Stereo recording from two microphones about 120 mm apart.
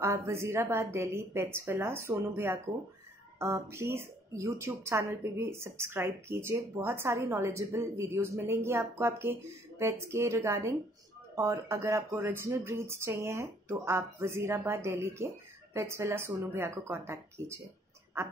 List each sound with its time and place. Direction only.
0.0 s a woman's voice: 20° right (ahead or behind)